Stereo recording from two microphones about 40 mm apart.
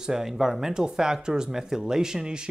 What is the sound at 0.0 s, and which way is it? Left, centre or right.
Speech, centre.